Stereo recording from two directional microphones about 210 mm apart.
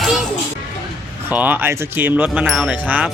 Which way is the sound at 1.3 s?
10° right (ahead or behind).